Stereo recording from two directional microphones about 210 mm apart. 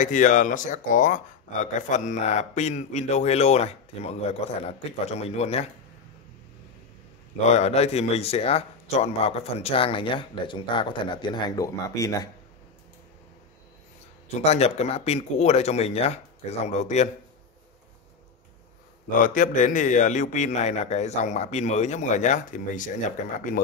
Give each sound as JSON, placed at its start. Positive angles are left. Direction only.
{"t": 0.0, "sound": "speech", "side_deg": 35}
{"t": 7.4, "sound": "speech", "side_deg": 30}
{"t": 14.4, "sound": "speech", "side_deg": 30}
{"t": 19.2, "sound": "speech", "side_deg": 40}